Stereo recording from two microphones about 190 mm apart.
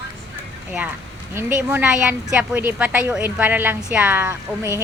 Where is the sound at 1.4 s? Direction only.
10° right (ahead or behind).